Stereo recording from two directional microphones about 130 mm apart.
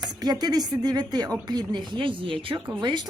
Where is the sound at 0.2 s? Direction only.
30° right (ahead or behind).